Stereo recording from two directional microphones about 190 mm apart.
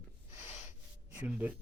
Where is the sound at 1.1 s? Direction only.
10° right (ahead or behind).